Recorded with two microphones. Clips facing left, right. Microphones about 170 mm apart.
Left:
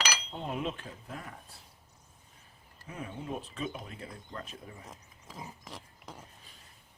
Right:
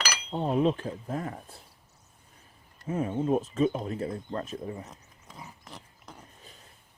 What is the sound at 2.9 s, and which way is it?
Speech, 45° right (ahead or behind).